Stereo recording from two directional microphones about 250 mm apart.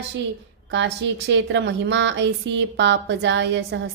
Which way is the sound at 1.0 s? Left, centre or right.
Right.